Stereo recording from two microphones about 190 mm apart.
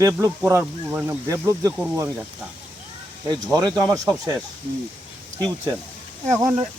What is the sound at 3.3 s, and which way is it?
Speech, 20° right (ahead or behind).